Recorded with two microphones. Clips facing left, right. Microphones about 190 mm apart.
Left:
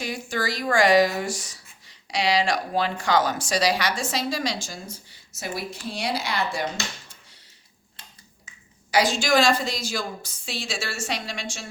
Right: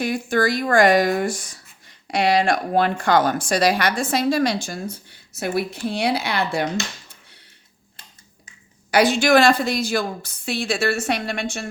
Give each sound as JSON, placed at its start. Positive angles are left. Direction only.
{"t": 0.0, "sound": "speech", "side_deg": -55}
{"t": 8.9, "sound": "speech", "side_deg": -60}